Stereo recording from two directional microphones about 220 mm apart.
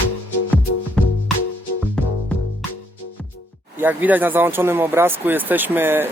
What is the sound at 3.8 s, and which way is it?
Speech, 10° right (ahead or behind).